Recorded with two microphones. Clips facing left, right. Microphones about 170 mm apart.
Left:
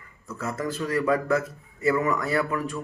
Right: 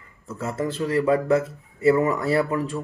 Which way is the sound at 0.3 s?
30° right (ahead or behind).